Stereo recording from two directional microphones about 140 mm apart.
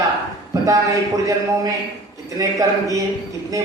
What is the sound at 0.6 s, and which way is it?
A man's voice, 25° right (ahead or behind).